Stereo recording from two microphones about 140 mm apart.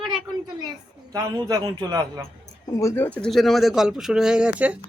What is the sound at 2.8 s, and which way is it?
Speech, 20° left (ahead or behind).